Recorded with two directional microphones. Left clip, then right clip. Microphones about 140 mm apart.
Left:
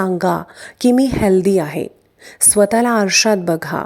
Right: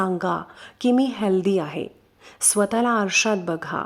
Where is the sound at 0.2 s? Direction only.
35° left (ahead or behind).